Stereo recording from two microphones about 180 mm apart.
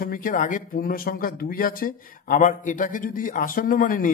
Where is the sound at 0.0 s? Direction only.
50° left (ahead or behind).